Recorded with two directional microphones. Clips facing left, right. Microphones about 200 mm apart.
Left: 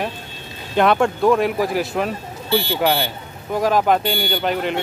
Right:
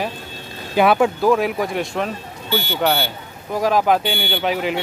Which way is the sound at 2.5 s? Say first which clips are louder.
Left 3 dB; 30° left (ahead or behind).